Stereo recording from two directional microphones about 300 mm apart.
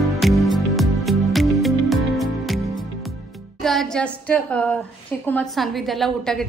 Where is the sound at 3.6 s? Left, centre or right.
Centre.